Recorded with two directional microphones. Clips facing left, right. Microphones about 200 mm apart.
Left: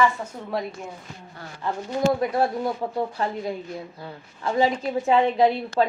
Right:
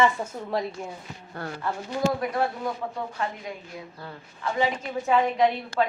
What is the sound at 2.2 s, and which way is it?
Speech, 35° left (ahead or behind).